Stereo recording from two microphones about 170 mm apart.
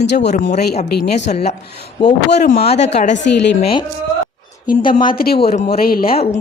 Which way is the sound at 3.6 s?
30° left (ahead or behind).